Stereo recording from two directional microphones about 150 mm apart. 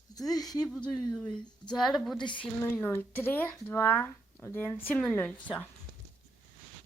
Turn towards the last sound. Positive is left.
turn(degrees=10)  # may be behind; listen again after turning